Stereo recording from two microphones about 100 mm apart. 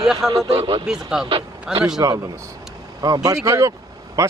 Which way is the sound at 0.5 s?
65° right (ahead or behind).